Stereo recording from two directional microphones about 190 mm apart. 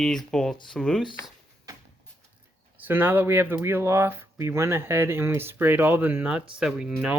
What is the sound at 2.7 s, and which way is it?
Speech, 10° right (ahead or behind).